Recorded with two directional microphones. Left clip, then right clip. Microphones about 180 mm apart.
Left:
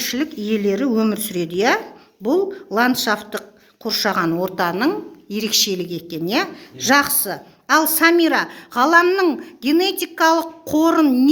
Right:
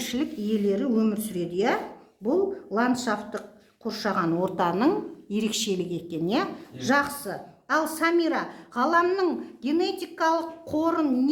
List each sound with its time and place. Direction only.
0.0 s a sound: 10° left (ahead or behind)
0.4 s a woman's voice: 30° left (ahead or behind)
4.3 s a woman's voice: 10° left (ahead or behind); by 11.3 s 25° left (ahead or behind)